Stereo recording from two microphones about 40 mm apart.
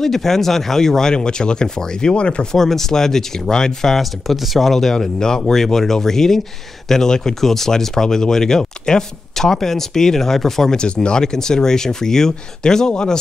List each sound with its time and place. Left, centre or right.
0.0 s speech: centre
1.1 s speech: left
2.5 s speech: centre
4.0 s speech: centre; by 13.2 s left